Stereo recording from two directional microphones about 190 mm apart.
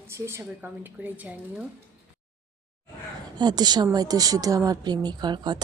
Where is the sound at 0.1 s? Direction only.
15° right (ahead or behind).